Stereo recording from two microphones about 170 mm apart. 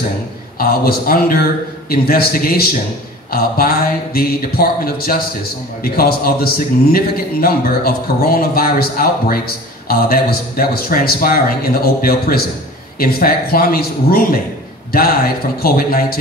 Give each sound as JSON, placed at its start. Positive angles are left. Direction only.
{"t": 0.6, "sound": "a man's voice", "side_deg": 60}
{"t": 15.6, "sound": "a man's voice", "side_deg": 60}